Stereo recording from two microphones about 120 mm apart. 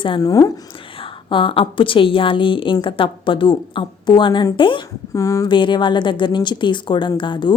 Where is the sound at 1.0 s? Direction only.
45° left (ahead or behind).